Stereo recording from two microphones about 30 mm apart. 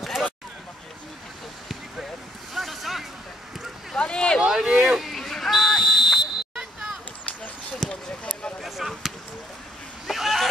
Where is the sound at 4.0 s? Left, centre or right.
Left.